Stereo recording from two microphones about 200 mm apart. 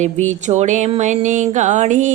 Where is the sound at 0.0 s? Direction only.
35° right (ahead or behind).